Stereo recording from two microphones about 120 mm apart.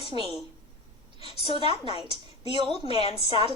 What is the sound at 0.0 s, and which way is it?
A woman's voice, 55° left (ahead or behind).